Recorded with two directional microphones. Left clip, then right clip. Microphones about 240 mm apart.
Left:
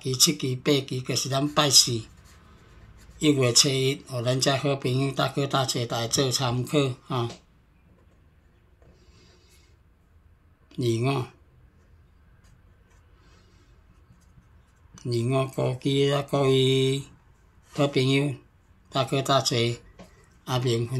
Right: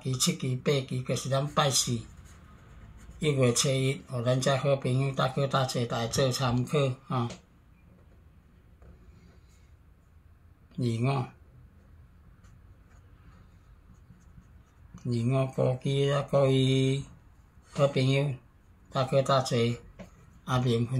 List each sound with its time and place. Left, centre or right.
0.1 s speech: left
3.2 s speech: left
10.8 s speech: left
15.0 s speech: left